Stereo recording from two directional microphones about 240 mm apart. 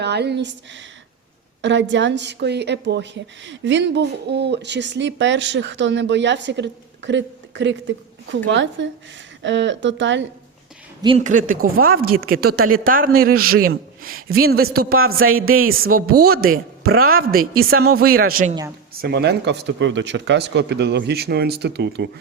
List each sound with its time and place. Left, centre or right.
0.0 s a woman's voice: right
11.0 s a man's voice: right
14.3 s a man's voice: right
17.9 s a man's voice: right